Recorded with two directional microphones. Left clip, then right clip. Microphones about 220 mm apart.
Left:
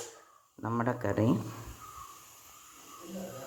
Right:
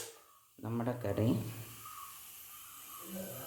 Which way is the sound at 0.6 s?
10° left (ahead or behind).